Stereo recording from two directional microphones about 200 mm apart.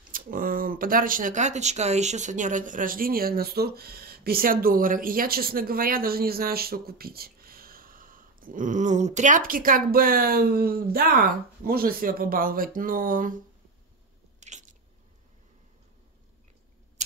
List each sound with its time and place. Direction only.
0.1 s speech: 45° right (ahead or behind)
14.4 s biting: 35° right (ahead or behind)